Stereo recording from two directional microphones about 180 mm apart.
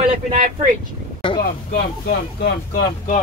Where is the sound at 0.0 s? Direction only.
40° right (ahead or behind).